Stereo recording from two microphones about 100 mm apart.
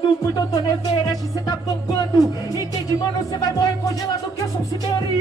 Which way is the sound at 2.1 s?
35° left (ahead or behind).